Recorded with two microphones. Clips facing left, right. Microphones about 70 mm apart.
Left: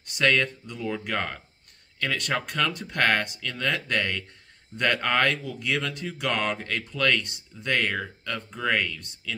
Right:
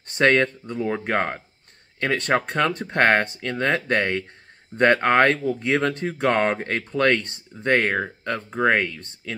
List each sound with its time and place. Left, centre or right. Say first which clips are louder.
0.1 s speech: right 5 dB; right